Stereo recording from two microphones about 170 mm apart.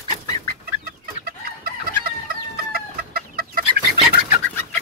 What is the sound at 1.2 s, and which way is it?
Chicken, 60° right (ahead or behind).